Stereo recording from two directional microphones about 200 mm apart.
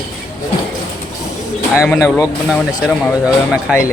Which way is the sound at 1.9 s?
10° left (ahead or behind).